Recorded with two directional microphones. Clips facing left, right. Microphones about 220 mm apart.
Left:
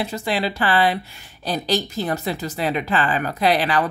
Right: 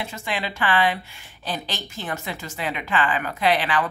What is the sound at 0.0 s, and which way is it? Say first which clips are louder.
A woman's voice: left 6 dB; 35° left (ahead or behind).